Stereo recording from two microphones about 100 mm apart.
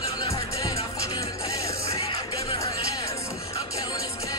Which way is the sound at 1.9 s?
80° left.